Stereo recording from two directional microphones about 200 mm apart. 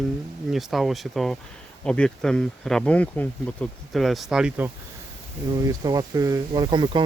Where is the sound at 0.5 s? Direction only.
Centre (ahead or behind).